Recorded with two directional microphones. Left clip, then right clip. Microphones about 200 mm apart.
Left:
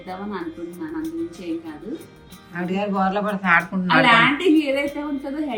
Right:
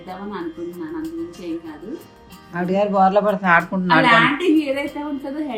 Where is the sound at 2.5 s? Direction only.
25° right (ahead or behind).